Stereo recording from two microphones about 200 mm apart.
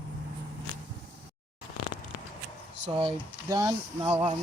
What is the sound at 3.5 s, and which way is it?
Speech, 15° right (ahead or behind).